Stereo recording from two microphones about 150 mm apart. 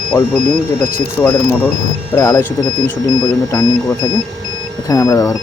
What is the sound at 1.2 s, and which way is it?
Speech, 10° left (ahead or behind).